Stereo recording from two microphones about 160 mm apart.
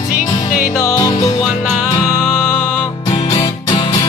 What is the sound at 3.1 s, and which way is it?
Music, 30° left (ahead or behind).